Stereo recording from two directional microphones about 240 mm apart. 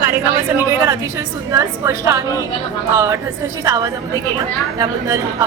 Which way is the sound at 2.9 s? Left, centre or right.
Centre.